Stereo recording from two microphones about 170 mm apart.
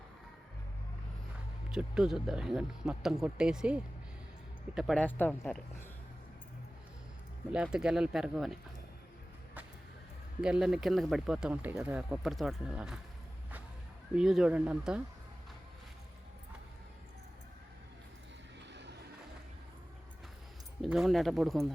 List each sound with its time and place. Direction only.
1.7 s speech: 5° right (ahead or behind)
4.9 s speech: 10° left (ahead or behind)
7.5 s speech: 5° right (ahead or behind)
10.4 s speech: 5° right (ahead or behind)
14.2 s speech: 5° right (ahead or behind)
18.7 s a sound: 90° right
20.8 s speech: centre (ahead or behind)